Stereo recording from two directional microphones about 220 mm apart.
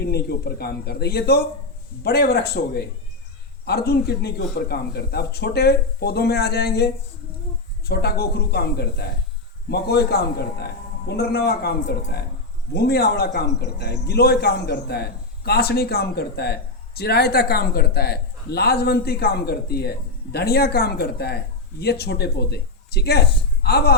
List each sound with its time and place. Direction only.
0.0 s a man's voice: 45° left (ahead or behind)